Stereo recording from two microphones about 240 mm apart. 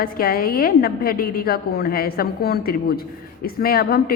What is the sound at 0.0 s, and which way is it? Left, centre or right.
A man's voice, left.